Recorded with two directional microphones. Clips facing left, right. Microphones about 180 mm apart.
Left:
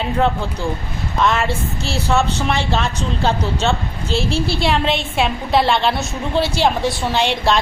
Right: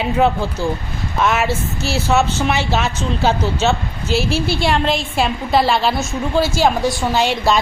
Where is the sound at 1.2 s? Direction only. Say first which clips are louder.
Right 1 dB; 5° right (ahead or behind).